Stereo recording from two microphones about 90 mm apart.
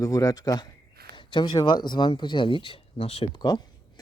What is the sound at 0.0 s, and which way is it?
Speech, 40° left (ahead or behind).